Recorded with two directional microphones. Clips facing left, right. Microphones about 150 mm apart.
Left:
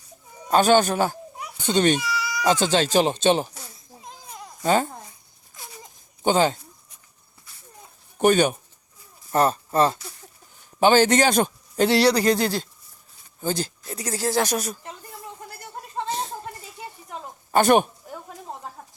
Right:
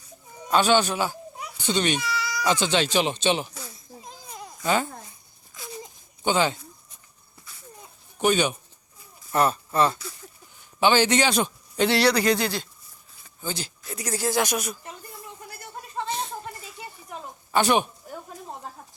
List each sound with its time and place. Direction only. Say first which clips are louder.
0.5 s a child's voice: left 3 dB; 45° left (ahead or behind)
4.6 s a man's voice: left 3 dB; 40° left (ahead or behind)
6.2 s a man's voice: left 3 dB; 40° left (ahead or behind)
8.2 s a man's voice: left 4 dB; 50° left (ahead or behind)
13.8 s a man's voice: right 2 dB; 30° left (ahead or behind)
16.0 s a sound: left 2 dB; 40° left (ahead or behind)
17.5 s a man's voice: left 4 dB; 50° left (ahead or behind)